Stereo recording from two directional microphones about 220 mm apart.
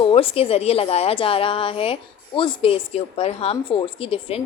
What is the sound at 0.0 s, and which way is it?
A woman's voice, 25° left (ahead or behind).